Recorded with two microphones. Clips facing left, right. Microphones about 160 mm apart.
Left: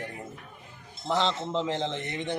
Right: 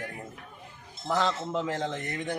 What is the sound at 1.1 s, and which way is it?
Speech, 25° left (ahead or behind).